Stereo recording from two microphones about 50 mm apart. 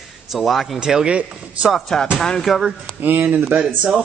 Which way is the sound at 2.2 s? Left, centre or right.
Centre.